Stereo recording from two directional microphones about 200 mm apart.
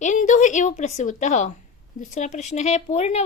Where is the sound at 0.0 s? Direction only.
40° left (ahead or behind).